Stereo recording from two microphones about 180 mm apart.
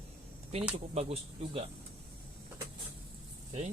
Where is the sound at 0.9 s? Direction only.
35° right (ahead or behind).